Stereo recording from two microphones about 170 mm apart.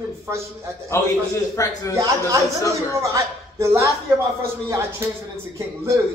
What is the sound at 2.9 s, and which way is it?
Speech, 20° right (ahead or behind).